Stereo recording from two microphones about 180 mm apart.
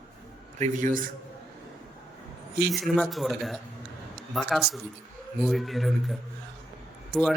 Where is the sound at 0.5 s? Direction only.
40° right (ahead or behind).